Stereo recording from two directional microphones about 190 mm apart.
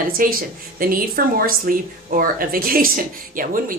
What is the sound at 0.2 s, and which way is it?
Speech, 50° right (ahead or behind).